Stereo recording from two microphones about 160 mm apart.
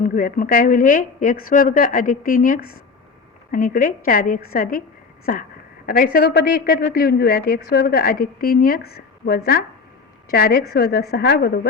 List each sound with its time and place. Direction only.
0.0 s a woman's voice: 60° left (ahead or behind); by 11.7 s 80° left